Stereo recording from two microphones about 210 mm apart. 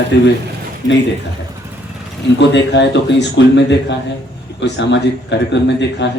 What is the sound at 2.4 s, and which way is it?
A man's voice, 55° left (ahead or behind).